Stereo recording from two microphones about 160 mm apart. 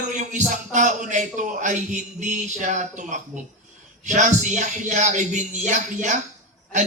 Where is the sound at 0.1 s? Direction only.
50° right (ahead or behind).